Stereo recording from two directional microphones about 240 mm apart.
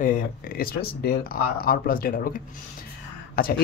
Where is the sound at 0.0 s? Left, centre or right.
Left.